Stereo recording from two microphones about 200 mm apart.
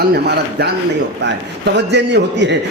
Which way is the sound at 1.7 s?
60° right (ahead or behind).